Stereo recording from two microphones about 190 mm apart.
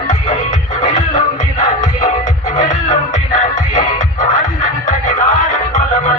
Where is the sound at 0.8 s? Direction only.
40° left (ahead or behind).